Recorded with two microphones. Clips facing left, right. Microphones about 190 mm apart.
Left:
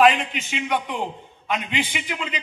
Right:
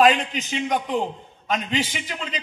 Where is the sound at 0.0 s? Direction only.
40° right (ahead or behind).